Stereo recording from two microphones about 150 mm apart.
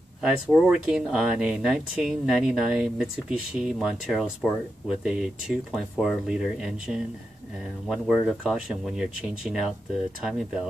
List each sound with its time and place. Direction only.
0.2 s speech: 5° right (ahead or behind)